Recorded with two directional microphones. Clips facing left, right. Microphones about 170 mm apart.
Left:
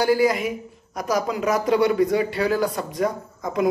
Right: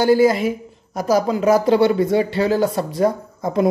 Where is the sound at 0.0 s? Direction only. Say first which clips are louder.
Right 5 dB; 25° right (ahead or behind).